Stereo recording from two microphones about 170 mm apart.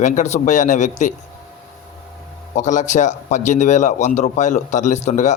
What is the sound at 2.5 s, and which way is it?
A man's voice, 45° left (ahead or behind).